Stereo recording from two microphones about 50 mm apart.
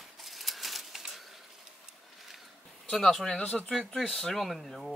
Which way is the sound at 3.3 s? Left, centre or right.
Left.